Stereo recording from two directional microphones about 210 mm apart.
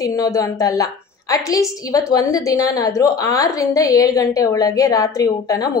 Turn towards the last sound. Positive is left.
turn(degrees=15)  # may be behind; listen again after turning